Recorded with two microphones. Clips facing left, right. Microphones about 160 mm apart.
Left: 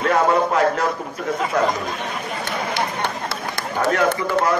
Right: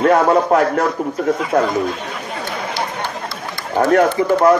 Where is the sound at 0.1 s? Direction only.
50° right (ahead or behind).